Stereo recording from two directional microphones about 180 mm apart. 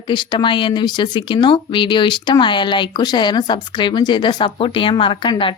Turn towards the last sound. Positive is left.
turn(degrees=25)  # may be behind; listen again after turning